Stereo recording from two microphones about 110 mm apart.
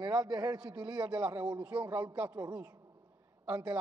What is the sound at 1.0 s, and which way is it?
Speech, 15° right (ahead or behind).